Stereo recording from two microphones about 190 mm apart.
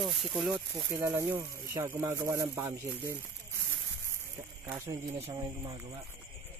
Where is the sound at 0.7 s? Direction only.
15° right (ahead or behind).